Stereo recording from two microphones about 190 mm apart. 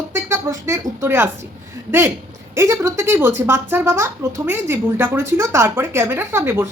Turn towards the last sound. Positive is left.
turn(degrees=-10)  # may be behind; listen again after turning